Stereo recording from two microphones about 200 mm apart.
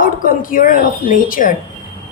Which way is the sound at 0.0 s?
45° left (ahead or behind).